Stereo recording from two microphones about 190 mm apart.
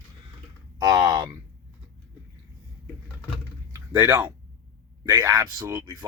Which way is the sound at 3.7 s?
20° right (ahead or behind).